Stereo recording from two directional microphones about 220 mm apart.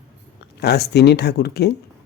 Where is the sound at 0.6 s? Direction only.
50° left (ahead or behind).